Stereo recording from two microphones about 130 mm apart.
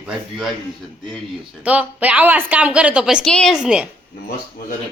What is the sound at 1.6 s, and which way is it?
A woman's voice, 10° right (ahead or behind).